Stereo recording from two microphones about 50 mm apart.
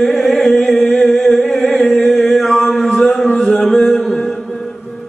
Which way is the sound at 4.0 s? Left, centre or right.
Centre.